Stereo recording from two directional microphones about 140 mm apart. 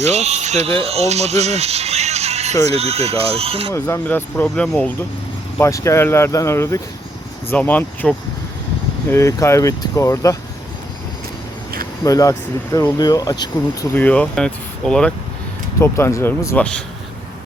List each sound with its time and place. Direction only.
0.0 s speech: 50° right (ahead or behind)
3.7 s speech: 20° left (ahead or behind)
5.5 s speech: 20° left (ahead or behind)
12.0 s speech: 25° left (ahead or behind)
13.9 s speech: 10° left (ahead or behind)
15.8 s speech: 20° left (ahead or behind)